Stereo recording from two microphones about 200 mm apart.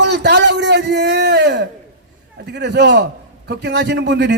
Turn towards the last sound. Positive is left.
turn(degrees=-60)  # may be behind; listen again after turning